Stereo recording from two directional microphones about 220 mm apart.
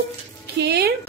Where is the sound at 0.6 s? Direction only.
45° right (ahead or behind).